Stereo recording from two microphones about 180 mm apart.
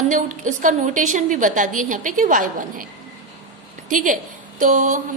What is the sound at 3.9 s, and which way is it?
A woman's voice, 45° right (ahead or behind).